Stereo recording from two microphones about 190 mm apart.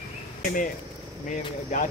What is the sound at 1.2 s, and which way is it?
Speech, 40° left (ahead or behind).